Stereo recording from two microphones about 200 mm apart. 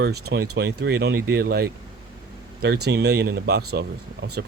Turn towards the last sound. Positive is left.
turn(degrees=-55)  # may be behind; listen again after turning